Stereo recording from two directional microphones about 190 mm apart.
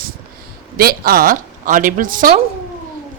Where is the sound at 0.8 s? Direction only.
50° right (ahead or behind).